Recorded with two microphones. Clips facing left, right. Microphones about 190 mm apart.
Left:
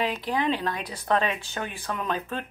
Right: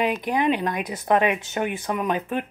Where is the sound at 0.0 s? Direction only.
15° right (ahead or behind).